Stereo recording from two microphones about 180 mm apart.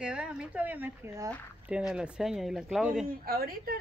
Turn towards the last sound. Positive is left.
turn(degrees=-55)  # may be behind; listen again after turning